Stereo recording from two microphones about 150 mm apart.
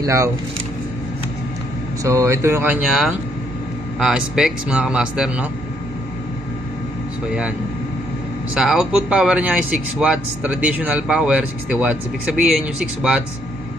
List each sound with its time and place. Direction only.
0.0 s speech: 20° right (ahead or behind)
2.0 s speech: 20° right (ahead or behind)
4.0 s speech: 5° right (ahead or behind)
8.5 s speech: 5° right (ahead or behind)